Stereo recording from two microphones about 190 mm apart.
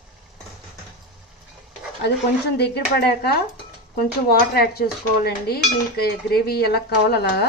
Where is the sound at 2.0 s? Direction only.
60° left (ahead or behind).